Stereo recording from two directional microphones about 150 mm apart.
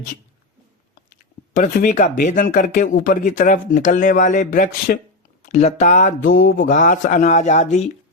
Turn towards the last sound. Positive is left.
turn(degrees=50)  # may be behind; listen again after turning